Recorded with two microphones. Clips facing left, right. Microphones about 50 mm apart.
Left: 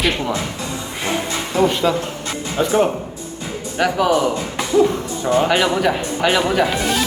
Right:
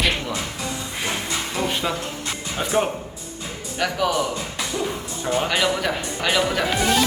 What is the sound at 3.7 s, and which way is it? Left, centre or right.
Speech, centre.